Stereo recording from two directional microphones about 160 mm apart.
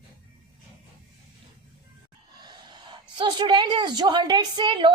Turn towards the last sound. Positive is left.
turn(degrees=-30)  # may be behind; listen again after turning